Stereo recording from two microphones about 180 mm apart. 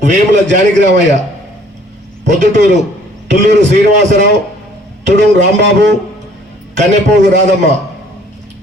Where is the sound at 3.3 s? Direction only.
75° right (ahead or behind).